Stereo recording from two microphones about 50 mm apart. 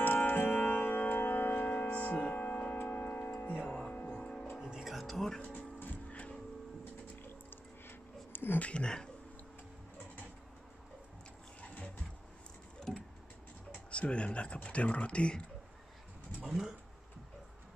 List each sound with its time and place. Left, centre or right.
0.0 s music: left
2.0 s music: left
2.9 s tick-tock: left
3.5 s music: left
4.6 s music: centre
5.4 s music: left
8.3 s a sound: left
8.5 s speech: left
13.8 s speech: left
16.4 s a sound: centre